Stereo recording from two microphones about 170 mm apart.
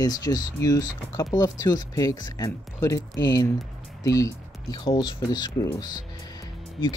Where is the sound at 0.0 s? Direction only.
20° left (ahead or behind).